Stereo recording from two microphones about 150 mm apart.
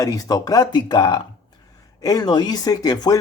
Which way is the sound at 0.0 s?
25° left (ahead or behind).